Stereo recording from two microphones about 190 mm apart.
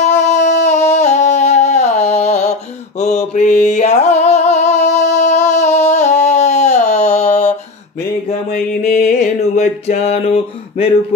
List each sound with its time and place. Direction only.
0.0 s a sound: 35° left (ahead or behind)
3.0 s mantra: 40° left (ahead or behind)
3.6 s singing: 40° left (ahead or behind)
8.3 s music: 45° left (ahead or behind)